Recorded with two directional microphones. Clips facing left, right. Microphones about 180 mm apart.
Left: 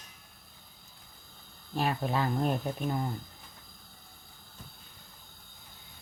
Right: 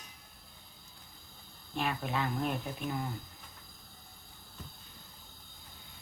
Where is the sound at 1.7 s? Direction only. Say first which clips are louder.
Left 4 dB; 35° left (ahead or behind).